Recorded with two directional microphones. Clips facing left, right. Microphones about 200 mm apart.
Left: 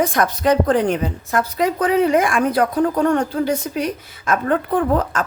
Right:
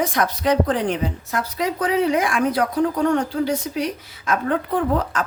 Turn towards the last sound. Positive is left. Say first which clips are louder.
# left 3 dB
turn(degrees=50)  # may be behind; listen again after turning